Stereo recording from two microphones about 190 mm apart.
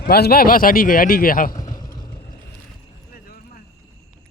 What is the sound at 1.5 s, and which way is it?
Vehicle, 20° left (ahead or behind).